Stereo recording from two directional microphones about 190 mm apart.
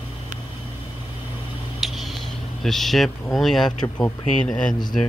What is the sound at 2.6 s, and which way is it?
Speech, centre (ahead or behind).